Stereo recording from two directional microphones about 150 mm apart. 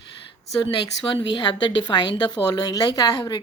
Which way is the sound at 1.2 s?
30° left (ahead or behind).